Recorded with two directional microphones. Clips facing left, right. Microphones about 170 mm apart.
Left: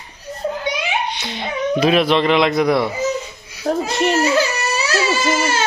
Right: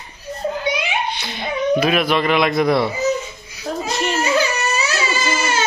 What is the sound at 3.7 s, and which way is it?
Speech, 60° left (ahead or behind).